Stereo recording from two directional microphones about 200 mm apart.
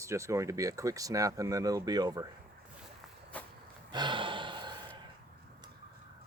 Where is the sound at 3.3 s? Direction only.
5° left (ahead or behind).